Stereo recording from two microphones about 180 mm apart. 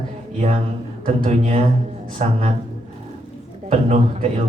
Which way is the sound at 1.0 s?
40° right (ahead or behind).